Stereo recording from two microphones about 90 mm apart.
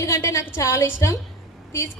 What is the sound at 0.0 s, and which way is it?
Speech, 35° left (ahead or behind).